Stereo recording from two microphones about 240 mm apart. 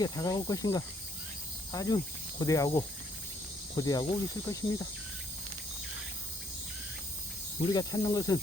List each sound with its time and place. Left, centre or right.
0.0 s speech: centre
7.7 s speech: centre